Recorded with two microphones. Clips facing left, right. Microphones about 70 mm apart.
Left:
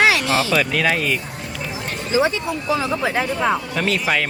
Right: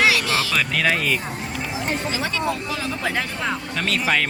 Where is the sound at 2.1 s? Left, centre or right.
Left.